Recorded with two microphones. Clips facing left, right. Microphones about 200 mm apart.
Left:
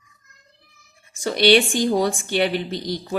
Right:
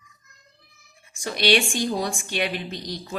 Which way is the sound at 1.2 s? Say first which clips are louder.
Left 6 dB; 35° left (ahead or behind).